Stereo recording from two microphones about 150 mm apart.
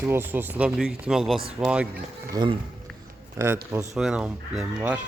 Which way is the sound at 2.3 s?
30° right (ahead or behind).